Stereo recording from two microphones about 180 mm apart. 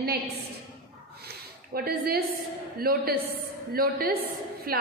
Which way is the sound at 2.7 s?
55° right (ahead or behind).